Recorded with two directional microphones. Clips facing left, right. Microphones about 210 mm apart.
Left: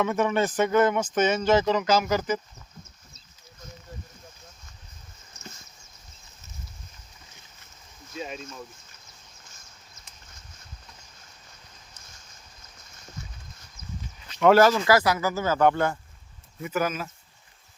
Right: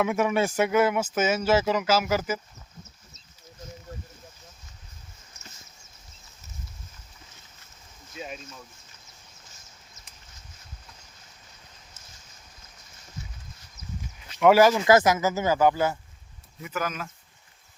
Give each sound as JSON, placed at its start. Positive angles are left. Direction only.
{"t": 0.0, "sound": "speech", "side_deg": -10}
{"t": 14.3, "sound": "speech", "side_deg": -10}
{"t": 15.6, "sound": "speech", "side_deg": -5}
{"t": 16.7, "sound": "speech", "side_deg": 10}